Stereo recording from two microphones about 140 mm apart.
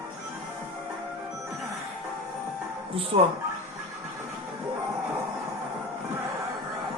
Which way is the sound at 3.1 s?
45° right (ahead or behind).